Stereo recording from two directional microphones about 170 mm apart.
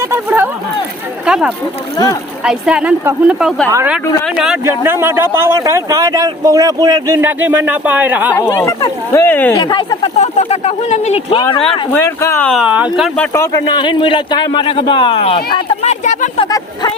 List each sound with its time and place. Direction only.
0.0 s a man's voice: 15° right (ahead or behind)
4.4 s speech: 5° right (ahead or behind)
4.6 s a man's voice: 15° right (ahead or behind)
8.4 s speech: 15° left (ahead or behind)
9.6 s speech: 25° left (ahead or behind)
10.2 s speech: 40° left (ahead or behind)
11.3 s speech: 25° left (ahead or behind)
11.9 s speech: 15° left (ahead or behind)
12.5 s speech: 5° right (ahead or behind)
13.1 s speech: 15° left (ahead or behind)
13.7 s speech: 30° left (ahead or behind); by 16.3 s 45° left (ahead or behind)
16.4 s speech: 25° left (ahead or behind)